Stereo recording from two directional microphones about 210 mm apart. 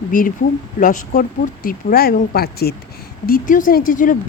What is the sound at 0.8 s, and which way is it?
Speech, 40° left (ahead or behind).